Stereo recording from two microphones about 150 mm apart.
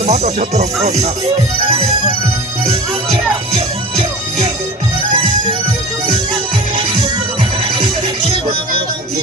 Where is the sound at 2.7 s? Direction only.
40° right (ahead or behind).